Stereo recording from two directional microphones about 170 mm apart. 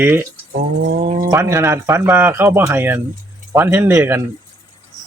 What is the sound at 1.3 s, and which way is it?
Speech, 15° right (ahead or behind).